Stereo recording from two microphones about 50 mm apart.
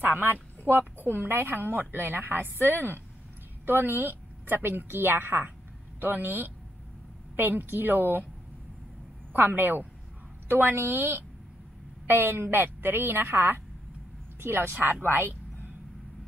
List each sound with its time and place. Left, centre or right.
0.0 s a woman's voice: right
9.3 s a woman's voice: right